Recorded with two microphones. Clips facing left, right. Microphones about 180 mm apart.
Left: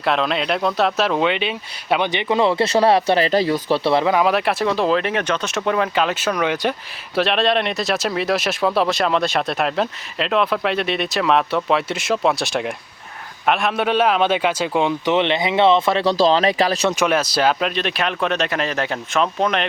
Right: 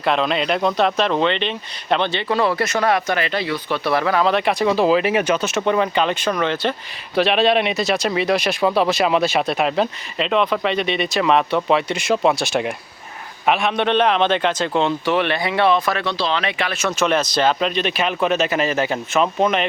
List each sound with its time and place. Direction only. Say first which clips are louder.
0.0 s speech: right 1 dB; centre (ahead or behind); by 3.8 s 40° left (ahead or behind)
3.8 s speech: even; 20° left (ahead or behind)
7.2 s speech: right 2 dB; centre (ahead or behind); by 16.1 s 25° left (ahead or behind)
16.1 s speech: left 6 dB; 40° left (ahead or behind)
16.9 s speech: even; 10° left (ahead or behind)